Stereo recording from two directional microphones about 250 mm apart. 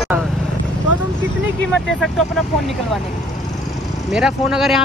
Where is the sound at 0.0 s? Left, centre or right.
Centre.